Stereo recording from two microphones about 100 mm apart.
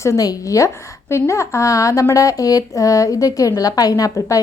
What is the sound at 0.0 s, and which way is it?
A woman's voice, 35° left (ahead or behind).